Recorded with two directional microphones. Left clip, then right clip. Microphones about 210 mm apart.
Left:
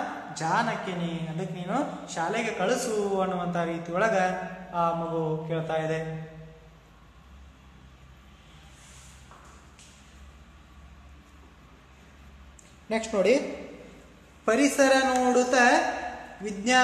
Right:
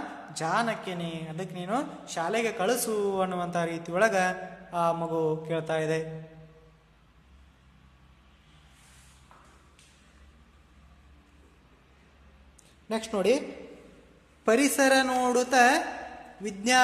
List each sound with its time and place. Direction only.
0.3 s a woman's voice: 50° right (ahead or behind)
12.8 s speech: 30° right (ahead or behind)
14.4 s a woman's voice: 45° right (ahead or behind)